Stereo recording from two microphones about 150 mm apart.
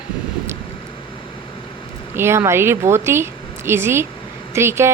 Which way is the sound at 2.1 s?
15° right (ahead or behind).